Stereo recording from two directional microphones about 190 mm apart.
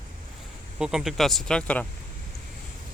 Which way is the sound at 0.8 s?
Centre (ahead or behind).